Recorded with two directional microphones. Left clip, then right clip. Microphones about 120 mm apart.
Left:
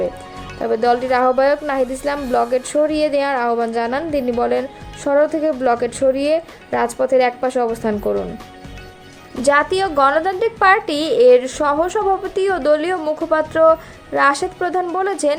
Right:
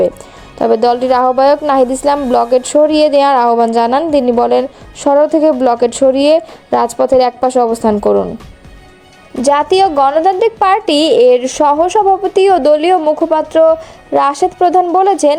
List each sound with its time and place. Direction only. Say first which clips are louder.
0.6 s speech: right 6 dB; 60° right (ahead or behind)
9.4 s a woman's voice: right 6 dB; 55° right (ahead or behind)
13.0 s speech: right 9 dB; 35° right (ahead or behind)
13.3 s a woman's voice: right 2 dB; 45° right (ahead or behind)